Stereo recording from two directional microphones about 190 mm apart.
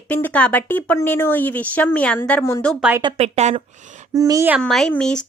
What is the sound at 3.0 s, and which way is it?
Speech, 35° right (ahead or behind).